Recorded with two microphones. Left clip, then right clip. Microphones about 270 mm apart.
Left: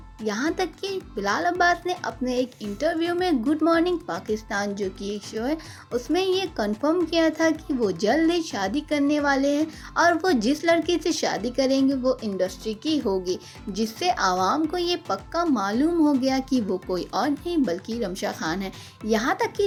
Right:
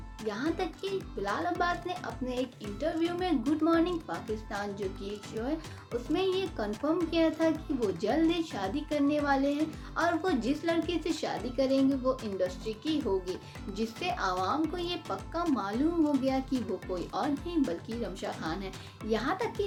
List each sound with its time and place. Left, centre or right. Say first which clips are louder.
0.3 s a child's voice: left 7 dB; left